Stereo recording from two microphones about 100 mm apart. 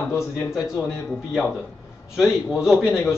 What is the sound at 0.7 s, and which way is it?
Speech, 5° left (ahead or behind).